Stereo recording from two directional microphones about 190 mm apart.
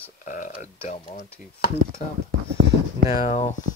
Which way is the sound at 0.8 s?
30° left (ahead or behind).